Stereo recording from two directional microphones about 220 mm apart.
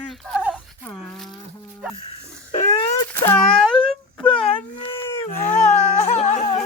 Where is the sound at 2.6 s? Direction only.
25° left (ahead or behind).